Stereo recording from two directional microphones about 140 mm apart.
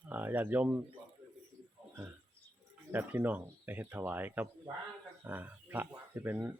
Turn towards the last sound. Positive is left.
turn(degrees=-15)  # may be behind; listen again after turning